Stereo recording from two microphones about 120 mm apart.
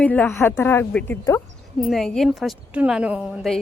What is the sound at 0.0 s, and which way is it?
Speech, 10° left (ahead or behind).